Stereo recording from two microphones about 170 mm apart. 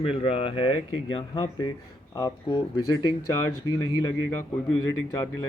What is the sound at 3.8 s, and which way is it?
Speech, 25° left (ahead or behind).